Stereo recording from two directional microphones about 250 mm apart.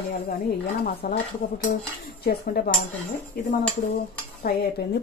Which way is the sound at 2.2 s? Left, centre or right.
Left.